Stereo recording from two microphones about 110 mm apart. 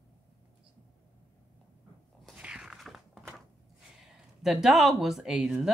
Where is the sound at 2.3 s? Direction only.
10° right (ahead or behind).